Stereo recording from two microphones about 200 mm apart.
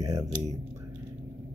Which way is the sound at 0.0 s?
15° right (ahead or behind).